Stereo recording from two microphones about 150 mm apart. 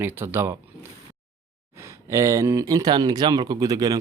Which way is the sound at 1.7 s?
20° right (ahead or behind).